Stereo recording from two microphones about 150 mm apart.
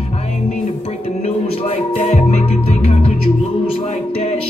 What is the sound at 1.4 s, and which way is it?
Music, 45° left (ahead or behind).